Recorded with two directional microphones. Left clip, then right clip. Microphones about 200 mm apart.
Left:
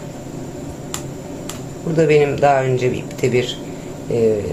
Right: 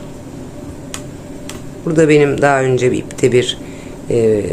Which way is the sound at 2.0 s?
30° right (ahead or behind).